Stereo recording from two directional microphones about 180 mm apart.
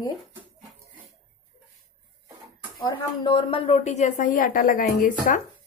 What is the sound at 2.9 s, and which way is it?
A woman's voice, 30° left (ahead or behind).